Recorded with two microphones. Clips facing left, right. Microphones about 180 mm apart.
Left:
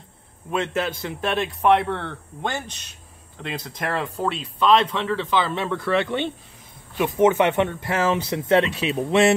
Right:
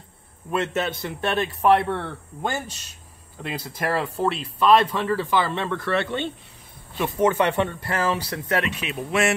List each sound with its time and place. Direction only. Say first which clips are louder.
0.5 s speech: even; centre (ahead or behind)
5.6 s speech: left 2 dB; 10° left (ahead or behind); by 9.3 s 30° left (ahead or behind)